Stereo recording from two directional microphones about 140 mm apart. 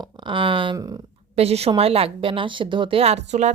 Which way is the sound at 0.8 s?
25° right (ahead or behind).